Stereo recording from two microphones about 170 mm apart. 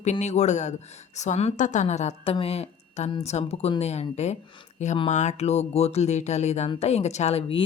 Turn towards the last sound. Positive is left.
turn(degrees=35)  # may be behind; listen again after turning